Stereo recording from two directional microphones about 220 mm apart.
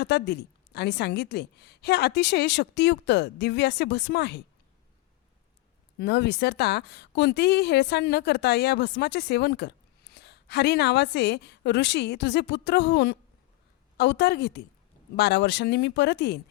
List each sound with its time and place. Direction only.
0.0 s a woman's voice: 45° left (ahead or behind)
6.0 s a woman's voice: 50° left (ahead or behind)